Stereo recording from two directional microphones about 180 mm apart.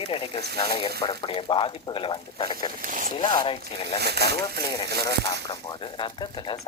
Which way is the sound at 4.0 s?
65° right (ahead or behind).